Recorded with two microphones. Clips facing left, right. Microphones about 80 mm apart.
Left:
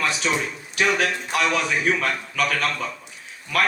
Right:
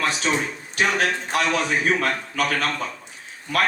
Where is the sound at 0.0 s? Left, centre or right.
Right.